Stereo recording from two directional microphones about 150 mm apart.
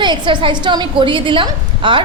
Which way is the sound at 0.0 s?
30° right (ahead or behind).